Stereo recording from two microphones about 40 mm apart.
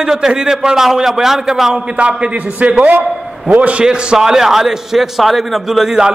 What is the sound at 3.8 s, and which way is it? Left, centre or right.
A man's voice, right.